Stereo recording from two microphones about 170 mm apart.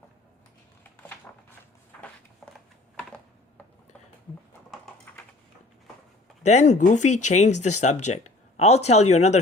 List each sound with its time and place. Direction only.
1.3 s a sound: 15° left (ahead or behind)
2.9 s computer keyboard: 5° left (ahead or behind)
6.4 s speech: 40° left (ahead or behind)